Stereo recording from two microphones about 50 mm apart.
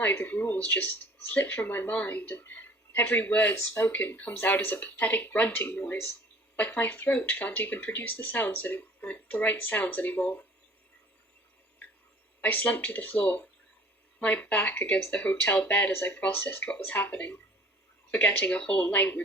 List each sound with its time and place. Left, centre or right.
0.2 s speech: left
0.8 s speech: left
1.9 s speech: left
2.3 s a sound: left
3.0 s speech: left
3.2 s speech: left
12.4 s speech: left
16.3 s speech: left